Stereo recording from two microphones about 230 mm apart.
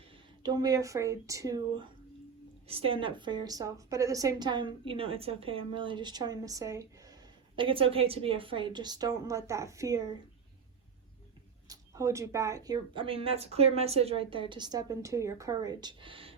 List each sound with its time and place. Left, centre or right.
0.4 s a woman's voice: centre
11.7 s a woman's voice: centre